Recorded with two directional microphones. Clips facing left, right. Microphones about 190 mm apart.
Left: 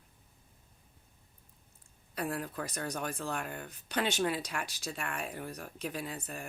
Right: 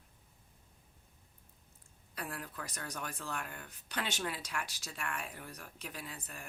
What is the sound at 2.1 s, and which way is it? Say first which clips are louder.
Speech: left 8 dB; 30° left (ahead or behind).